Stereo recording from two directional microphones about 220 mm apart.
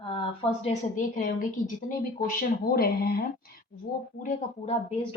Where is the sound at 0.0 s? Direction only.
25° left (ahead or behind); by 3.5 s 45° left (ahead or behind).